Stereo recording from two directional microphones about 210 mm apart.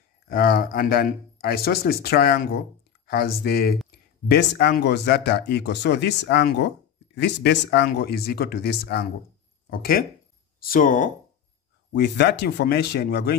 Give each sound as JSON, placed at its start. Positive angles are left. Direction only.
{"t": 0.3, "sound": "speech", "side_deg": 45}
{"t": 11.9, "sound": "speech", "side_deg": 55}